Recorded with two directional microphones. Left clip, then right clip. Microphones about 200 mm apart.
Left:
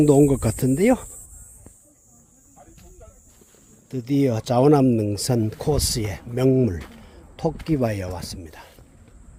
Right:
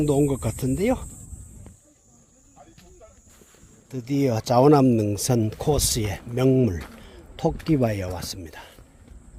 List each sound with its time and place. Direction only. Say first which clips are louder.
0.0 s speech: left 6 dB; 40° left (ahead or behind)
3.8 s speech: left 2 dB; 30° left (ahead or behind); by 8.7 s 10° right (ahead or behind)